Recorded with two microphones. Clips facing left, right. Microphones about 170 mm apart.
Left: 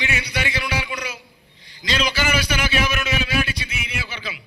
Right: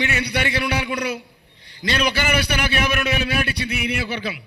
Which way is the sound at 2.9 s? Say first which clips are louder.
Right 2 dB; 60° right (ahead or behind).